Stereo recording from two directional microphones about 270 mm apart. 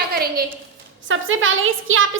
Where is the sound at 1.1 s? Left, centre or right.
Right.